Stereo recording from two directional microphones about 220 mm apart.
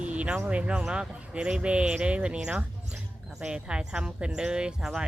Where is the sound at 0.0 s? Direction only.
5° right (ahead or behind).